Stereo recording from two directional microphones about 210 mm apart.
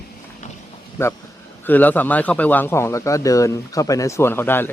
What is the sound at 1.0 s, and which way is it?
Speech, 10° left (ahead or behind).